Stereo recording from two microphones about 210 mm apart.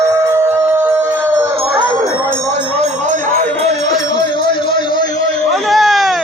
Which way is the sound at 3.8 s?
20° left (ahead or behind).